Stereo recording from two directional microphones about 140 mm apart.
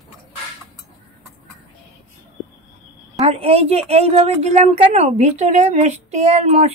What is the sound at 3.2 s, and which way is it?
Speech, 45° right (ahead or behind).